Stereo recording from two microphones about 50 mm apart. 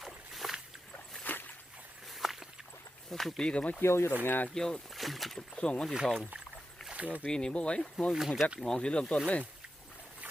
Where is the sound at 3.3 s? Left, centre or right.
Left.